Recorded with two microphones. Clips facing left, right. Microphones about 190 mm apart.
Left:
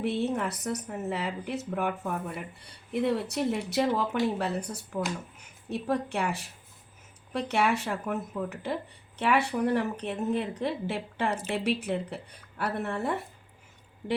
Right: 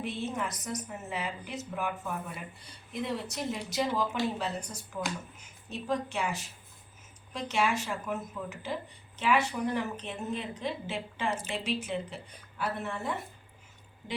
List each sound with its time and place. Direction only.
0.0 s speech: 65° left (ahead or behind)